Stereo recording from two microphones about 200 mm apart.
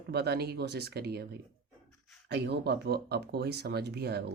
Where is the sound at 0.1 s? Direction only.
55° right (ahead or behind).